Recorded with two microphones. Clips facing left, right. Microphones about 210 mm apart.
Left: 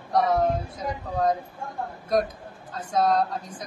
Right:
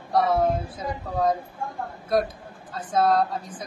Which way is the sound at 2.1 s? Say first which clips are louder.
Right 1 dB; 5° right (ahead or behind).